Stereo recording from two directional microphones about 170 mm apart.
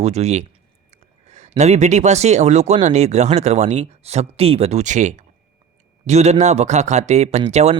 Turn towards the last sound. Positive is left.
turn(degrees=-40)  # may be behind; listen again after turning